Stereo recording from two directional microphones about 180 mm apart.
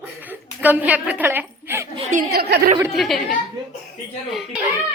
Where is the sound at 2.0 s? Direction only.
40° right (ahead or behind).